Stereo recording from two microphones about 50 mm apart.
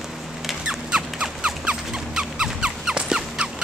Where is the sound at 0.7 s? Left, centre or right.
Centre.